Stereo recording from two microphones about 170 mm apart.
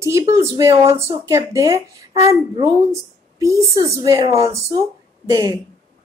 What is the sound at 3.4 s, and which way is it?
Speech, 20° right (ahead or behind).